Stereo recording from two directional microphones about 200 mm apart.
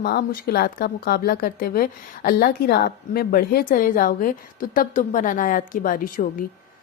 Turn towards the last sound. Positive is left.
turn(degrees=45)  # may be behind; listen again after turning